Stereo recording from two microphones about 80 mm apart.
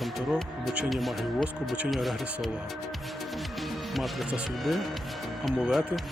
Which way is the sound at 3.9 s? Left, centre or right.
Centre.